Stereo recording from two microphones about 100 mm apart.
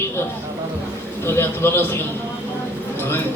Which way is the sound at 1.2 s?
25° left (ahead or behind).